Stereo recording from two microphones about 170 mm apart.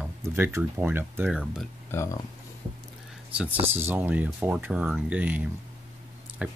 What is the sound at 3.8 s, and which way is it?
Speech, 10° right (ahead or behind).